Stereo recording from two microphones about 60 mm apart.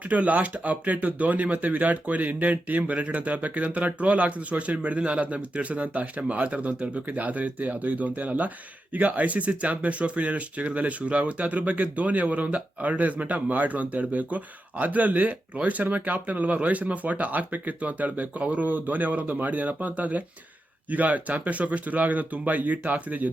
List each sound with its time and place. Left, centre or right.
0.0 s speech: right